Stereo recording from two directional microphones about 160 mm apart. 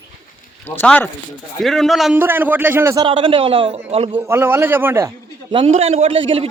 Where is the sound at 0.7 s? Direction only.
10° left (ahead or behind).